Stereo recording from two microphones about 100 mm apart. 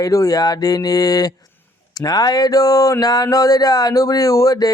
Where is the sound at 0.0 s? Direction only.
35° left (ahead or behind).